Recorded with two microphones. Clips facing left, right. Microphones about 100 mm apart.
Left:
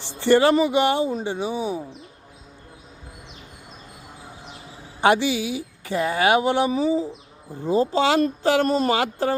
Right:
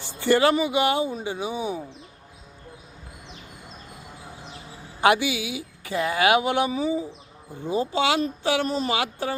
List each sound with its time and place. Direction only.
0.2 s a woman's voice: 30° left (ahead or behind)
4.9 s a woman's voice: 30° left (ahead or behind)
8.4 s a woman's voice: 45° left (ahead or behind)